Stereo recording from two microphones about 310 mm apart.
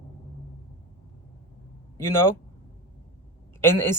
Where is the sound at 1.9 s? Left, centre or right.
Centre.